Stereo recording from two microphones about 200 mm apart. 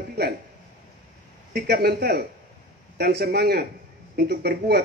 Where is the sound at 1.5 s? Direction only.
50° right (ahead or behind).